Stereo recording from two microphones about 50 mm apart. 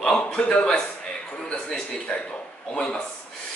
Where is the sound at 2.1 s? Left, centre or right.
Left.